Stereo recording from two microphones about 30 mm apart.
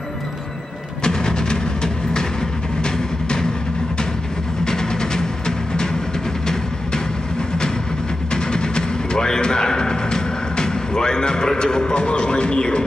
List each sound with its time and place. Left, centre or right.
1.0 s music: left
4.6 s music: left
8.3 s music: left